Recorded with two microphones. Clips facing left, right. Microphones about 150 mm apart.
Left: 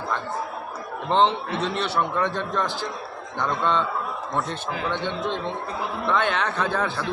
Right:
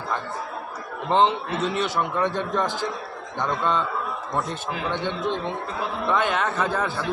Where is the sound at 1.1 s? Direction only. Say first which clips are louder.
Even; 5° right (ahead or behind).